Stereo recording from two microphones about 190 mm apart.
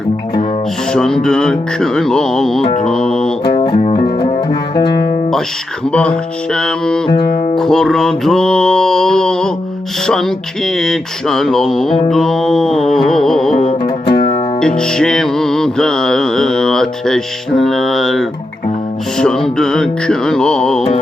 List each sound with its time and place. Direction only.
0.9 s music: 5° left (ahead or behind)
3.4 s music: 25° left (ahead or behind)
5.9 s music: 5° left (ahead or behind)
13.8 s music: 25° left (ahead or behind)
14.8 s music: 5° left (ahead or behind)